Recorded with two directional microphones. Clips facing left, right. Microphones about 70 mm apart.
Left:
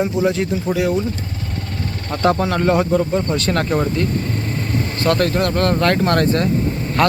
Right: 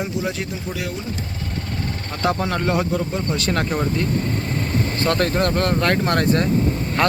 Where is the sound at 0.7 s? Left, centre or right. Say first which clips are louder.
Left 12 dB; centre.